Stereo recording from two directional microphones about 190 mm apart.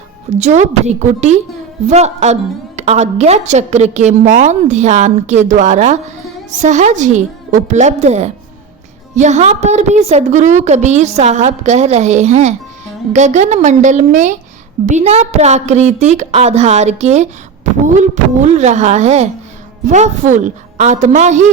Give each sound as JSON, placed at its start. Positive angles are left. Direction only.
{"t": 0.3, "sound": "a woman's voice", "side_deg": -35}